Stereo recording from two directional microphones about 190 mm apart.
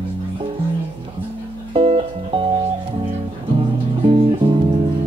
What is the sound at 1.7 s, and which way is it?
Music, 30° right (ahead or behind).